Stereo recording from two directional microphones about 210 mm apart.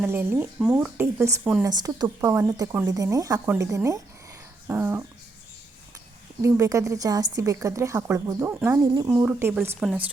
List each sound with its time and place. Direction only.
0.0 s speech: 10° right (ahead or behind)
6.4 s speech: 15° right (ahead or behind)